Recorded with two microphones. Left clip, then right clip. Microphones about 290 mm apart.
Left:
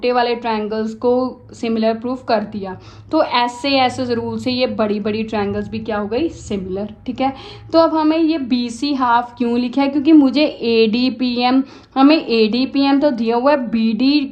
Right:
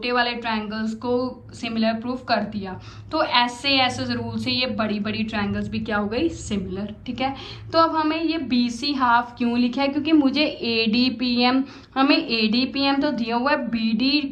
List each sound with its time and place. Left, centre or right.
0.0 s a woman's voice: centre